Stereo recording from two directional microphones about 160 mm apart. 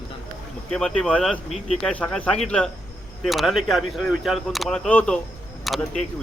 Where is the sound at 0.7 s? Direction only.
5° left (ahead or behind).